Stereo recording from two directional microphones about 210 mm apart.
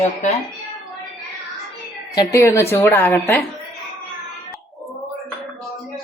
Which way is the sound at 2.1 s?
15° left (ahead or behind).